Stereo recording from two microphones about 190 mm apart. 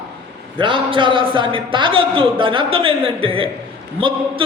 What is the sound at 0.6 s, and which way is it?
A woman's voice, 25° right (ahead or behind).